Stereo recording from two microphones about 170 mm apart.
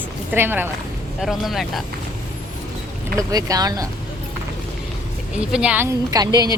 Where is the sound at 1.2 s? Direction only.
Centre (ahead or behind).